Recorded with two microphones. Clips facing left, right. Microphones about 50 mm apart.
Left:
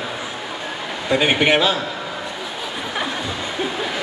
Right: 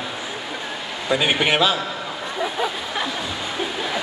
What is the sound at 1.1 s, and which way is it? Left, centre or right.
Speech, centre.